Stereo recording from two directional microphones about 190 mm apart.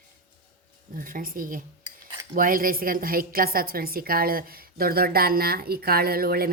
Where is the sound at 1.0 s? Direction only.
45° right (ahead or behind).